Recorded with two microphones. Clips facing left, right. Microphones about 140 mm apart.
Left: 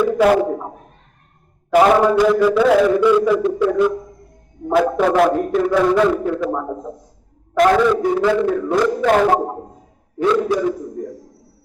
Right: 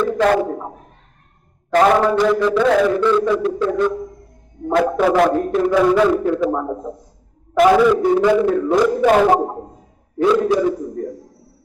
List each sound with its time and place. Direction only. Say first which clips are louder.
0.0 s a sound: left 2 dB; 10° left (ahead or behind)
1.7 s a man's voice: left 1 dB; 10° left (ahead or behind)
4.7 s a man's voice: even; centre (ahead or behind); by 9.0 s 20° right (ahead or behind)
9.0 s a man's voice: right 1 dB; 5° right (ahead or behind)